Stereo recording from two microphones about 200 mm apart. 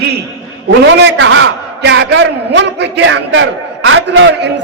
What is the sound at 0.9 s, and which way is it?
A man's voice, 65° right (ahead or behind).